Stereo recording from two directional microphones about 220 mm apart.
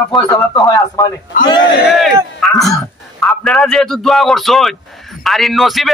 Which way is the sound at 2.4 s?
Centre (ahead or behind).